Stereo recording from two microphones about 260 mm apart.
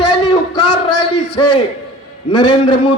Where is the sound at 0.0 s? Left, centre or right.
Left.